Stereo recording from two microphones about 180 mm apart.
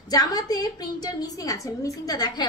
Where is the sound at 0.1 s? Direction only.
20° left (ahead or behind).